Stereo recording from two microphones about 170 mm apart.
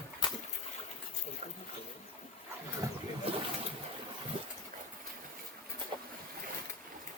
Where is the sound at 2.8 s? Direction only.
20° right (ahead or behind).